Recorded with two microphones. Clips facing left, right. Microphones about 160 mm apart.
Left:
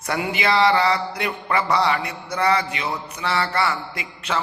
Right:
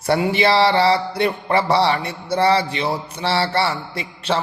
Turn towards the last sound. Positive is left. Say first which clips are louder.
# right 4 dB
turn(degrees=-30)  # may be behind; listen again after turning